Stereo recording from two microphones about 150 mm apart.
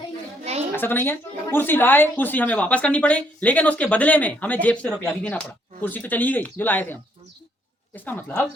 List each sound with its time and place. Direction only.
0.8 s speech: 15° left (ahead or behind)